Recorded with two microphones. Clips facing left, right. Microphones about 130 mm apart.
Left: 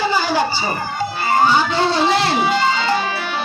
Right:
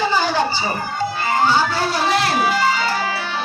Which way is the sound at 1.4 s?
20° left (ahead or behind).